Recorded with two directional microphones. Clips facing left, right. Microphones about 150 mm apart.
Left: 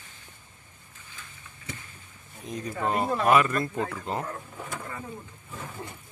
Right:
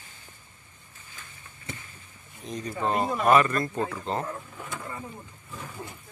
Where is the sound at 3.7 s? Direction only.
15° right (ahead or behind).